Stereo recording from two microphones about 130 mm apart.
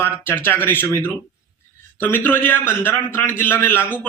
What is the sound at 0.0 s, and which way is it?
A man's voice, 15° left (ahead or behind).